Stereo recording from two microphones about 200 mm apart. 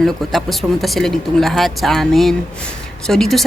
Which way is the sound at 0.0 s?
Centre (ahead or behind).